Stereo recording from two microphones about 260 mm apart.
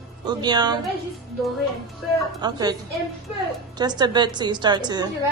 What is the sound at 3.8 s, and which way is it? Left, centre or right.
A woman's voice, centre.